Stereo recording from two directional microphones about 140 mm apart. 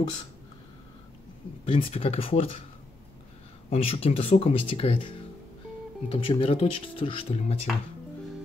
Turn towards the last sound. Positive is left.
turn(degrees=50)  # may be behind; listen again after turning